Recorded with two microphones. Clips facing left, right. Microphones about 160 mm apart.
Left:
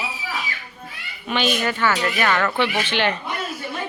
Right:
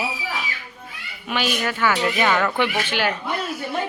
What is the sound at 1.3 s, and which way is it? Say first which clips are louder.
Speech: left 2 dB; 5° right (ahead or behind).